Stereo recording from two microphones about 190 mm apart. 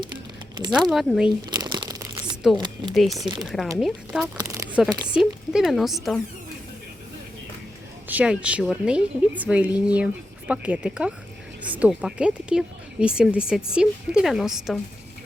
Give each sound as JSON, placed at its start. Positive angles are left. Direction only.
{"t": 0.7, "sound": "speech", "side_deg": 0}
{"t": 1.5, "sound": "crumpling", "side_deg": -20}
{"t": 2.6, "sound": "speech", "side_deg": -25}
{"t": 2.9, "sound": "speech", "side_deg": 0}
{"t": 3.2, "sound": "speech", "side_deg": -25}
{"t": 3.8, "sound": "speech", "side_deg": 0}
{"t": 4.4, "sound": "a sound", "side_deg": -15}
{"t": 5.1, "sound": "speech", "side_deg": -5}
{"t": 8.0, "sound": "a woman's voice", "side_deg": -5}